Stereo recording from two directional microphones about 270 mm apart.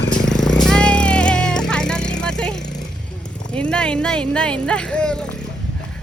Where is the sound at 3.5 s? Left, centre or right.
Centre.